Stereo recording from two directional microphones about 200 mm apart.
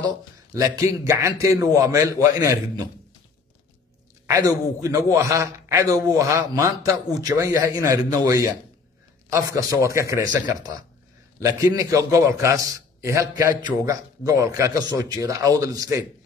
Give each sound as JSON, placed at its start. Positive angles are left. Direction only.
{"t": 0.6, "sound": "a man's voice", "side_deg": -15}
{"t": 4.3, "sound": "a man's voice", "side_deg": -15}